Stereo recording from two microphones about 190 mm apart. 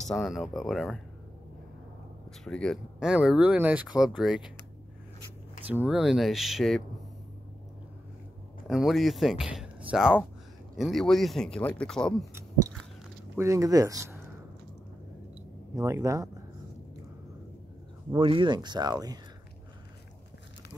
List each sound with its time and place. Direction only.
0.0 s speech: centre (ahead or behind)
2.4 s speech: 5° left (ahead or behind)
5.7 s speech: 5° right (ahead or behind)
8.6 s speech: centre (ahead or behind)
13.4 s speech: 15° right (ahead or behind)
15.7 s speech: 15° right (ahead or behind)
18.1 s speech: 25° right (ahead or behind)